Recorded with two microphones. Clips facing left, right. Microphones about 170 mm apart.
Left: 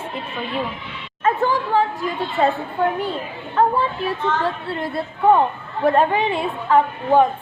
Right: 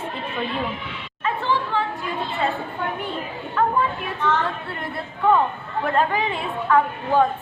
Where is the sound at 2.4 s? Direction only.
40° left (ahead or behind).